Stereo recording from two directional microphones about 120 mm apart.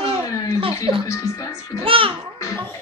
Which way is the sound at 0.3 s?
30° left (ahead or behind).